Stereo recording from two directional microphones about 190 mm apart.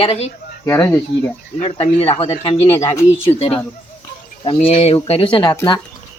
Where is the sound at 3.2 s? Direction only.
30° left (ahead or behind).